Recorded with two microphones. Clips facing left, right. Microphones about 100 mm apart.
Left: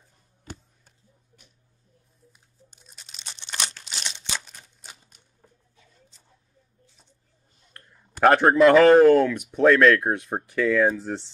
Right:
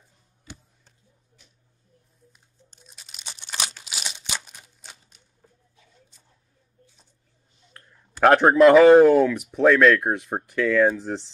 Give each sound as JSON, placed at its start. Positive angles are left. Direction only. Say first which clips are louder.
{"t": 0.5, "sound": "a sound", "louder": "left 3 dB", "side_deg": 45}
{"t": 2.8, "sound": "crumpling", "louder": "right 2 dB", "side_deg": 0}
{"t": 7.7, "sound": "a man's voice", "louder": "left 1 dB", "side_deg": 0}